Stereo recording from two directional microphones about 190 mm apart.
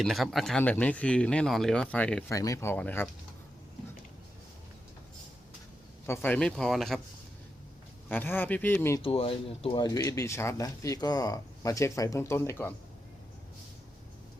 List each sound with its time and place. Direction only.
0.0 s speech: centre (ahead or behind)
2.3 s speech: 15° left (ahead or behind)
6.1 s speech: 10° left (ahead or behind)
8.1 s speech: 10° left (ahead or behind)
9.0 s speech: 30° left (ahead or behind); by 12.7 s 10° left (ahead or behind)